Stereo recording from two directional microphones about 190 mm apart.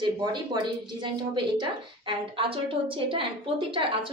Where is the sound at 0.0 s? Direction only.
25° right (ahead or behind).